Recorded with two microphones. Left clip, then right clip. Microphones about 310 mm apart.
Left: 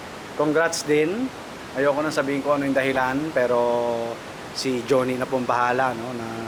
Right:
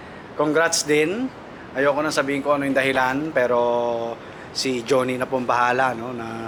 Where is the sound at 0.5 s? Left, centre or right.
Centre.